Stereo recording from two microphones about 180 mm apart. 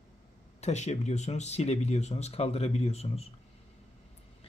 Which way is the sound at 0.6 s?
40° left (ahead or behind).